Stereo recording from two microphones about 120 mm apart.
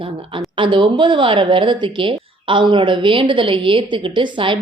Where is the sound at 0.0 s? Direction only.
45° right (ahead or behind).